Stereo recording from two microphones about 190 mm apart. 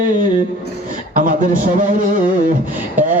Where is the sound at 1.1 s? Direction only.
45° right (ahead or behind).